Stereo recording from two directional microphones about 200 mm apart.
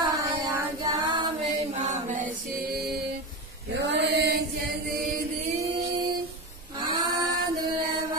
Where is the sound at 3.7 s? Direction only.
60° right (ahead or behind).